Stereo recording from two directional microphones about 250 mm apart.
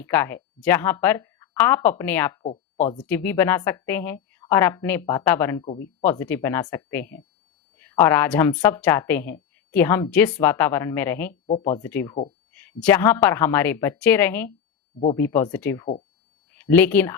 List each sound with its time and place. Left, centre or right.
0.0 s a woman's voice: centre
11.4 s speech: left
11.8 s a woman's voice: centre